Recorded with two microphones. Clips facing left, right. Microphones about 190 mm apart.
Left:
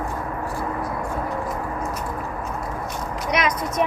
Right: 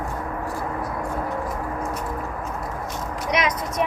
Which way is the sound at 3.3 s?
20° right (ahead or behind).